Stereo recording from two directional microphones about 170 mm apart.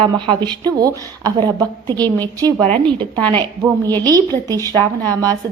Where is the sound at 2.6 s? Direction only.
5° left (ahead or behind).